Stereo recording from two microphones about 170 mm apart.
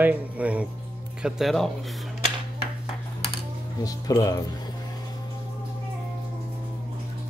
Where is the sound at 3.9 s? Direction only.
20° left (ahead or behind).